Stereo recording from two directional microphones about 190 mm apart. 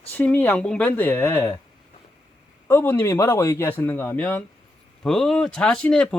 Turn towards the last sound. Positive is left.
turn(degrees=5)  # may be behind; listen again after turning